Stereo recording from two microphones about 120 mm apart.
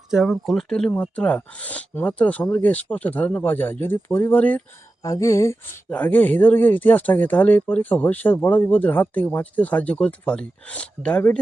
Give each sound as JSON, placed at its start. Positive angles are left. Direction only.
{"t": 0.1, "sound": "speech", "side_deg": 0}
{"t": 5.0, "sound": "a sound", "side_deg": 30}
{"t": 5.9, "sound": "speech", "side_deg": 15}